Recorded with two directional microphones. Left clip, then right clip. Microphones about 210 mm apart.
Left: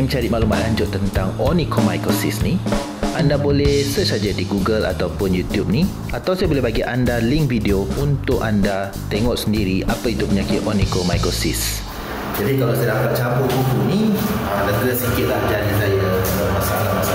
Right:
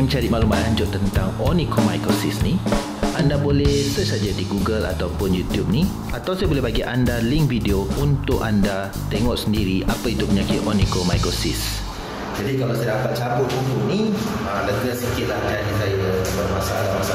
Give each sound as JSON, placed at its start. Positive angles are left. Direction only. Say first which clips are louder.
{"t": 0.1, "sound": "speech", "louder": "left 1 dB", "side_deg": 0}
{"t": 1.8, "sound": "speech", "louder": "left 1 dB", "side_deg": 0}
{"t": 2.7, "sound": "drum", "louder": "even", "side_deg": 0}
{"t": 3.3, "sound": "speech", "louder": "left 5 dB", "side_deg": 15}
{"t": 3.6, "sound": "speech", "louder": "left 3 dB", "side_deg": 0}
{"t": 4.6, "sound": "speech", "louder": "left 5 dB", "side_deg": 15}
{"t": 5.2, "sound": "speech", "louder": "left 1 dB", "side_deg": 0}
{"t": 5.8, "sound": "speech", "louder": "left 2 dB", "side_deg": 10}
{"t": 7.7, "sound": "speech", "louder": "left 2 dB", "side_deg": 0}
{"t": 9.3, "sound": "speech", "louder": "left 2 dB", "side_deg": 15}
{"t": 10.3, "sound": "speech", "louder": "left 1 dB", "side_deg": 0}